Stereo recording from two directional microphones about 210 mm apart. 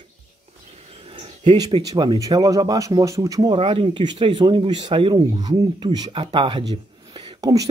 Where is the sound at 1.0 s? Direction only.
25° right (ahead or behind).